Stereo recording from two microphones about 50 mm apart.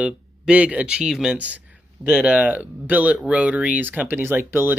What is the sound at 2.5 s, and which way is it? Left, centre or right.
Speech, right.